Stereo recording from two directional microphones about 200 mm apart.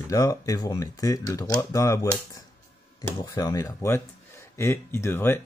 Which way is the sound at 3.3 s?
15° left (ahead or behind).